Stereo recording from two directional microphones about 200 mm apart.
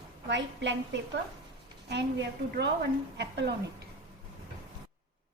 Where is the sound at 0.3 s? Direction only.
60° right (ahead or behind).